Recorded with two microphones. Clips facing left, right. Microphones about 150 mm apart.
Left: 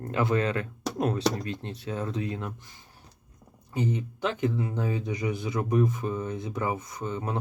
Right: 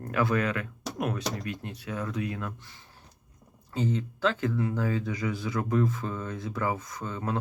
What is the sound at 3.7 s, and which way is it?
Speech, 15° left (ahead or behind).